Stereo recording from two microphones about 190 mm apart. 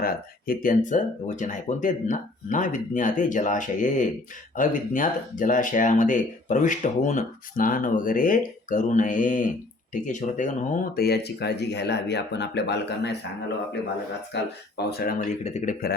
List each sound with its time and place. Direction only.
0.0 s speech: 50° left (ahead or behind)
14.3 s speech: 60° left (ahead or behind)
15.2 s speech: 35° left (ahead or behind)